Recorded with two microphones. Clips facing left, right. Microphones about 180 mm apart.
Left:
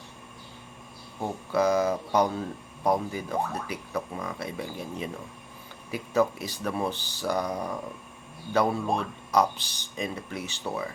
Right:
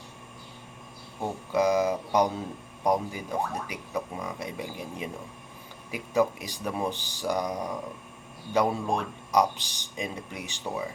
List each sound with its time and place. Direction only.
1.5 s speech: 15° right (ahead or behind)
8.5 s speech: 15° right (ahead or behind)